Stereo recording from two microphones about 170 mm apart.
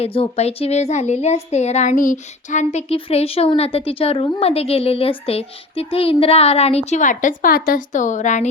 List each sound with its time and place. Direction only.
0.0 s speech: 35° left (ahead or behind)